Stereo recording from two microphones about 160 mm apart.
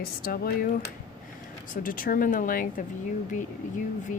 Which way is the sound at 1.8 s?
60° left (ahead or behind).